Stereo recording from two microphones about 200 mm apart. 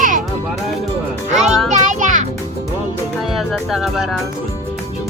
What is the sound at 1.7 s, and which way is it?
Music, 40° right (ahead or behind).